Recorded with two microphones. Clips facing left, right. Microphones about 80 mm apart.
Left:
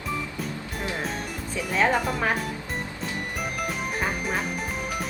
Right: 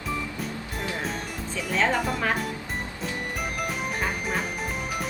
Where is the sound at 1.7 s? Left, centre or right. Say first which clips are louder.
Left 1 dB; centre.